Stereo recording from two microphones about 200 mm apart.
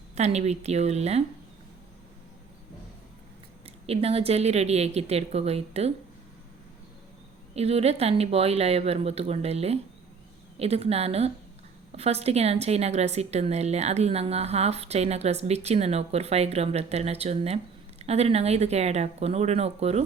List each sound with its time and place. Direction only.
0.2 s a woman's voice: 35° right (ahead or behind)
3.8 s a woman's voice: 30° right (ahead or behind)
7.5 s a woman's voice: 30° right (ahead or behind)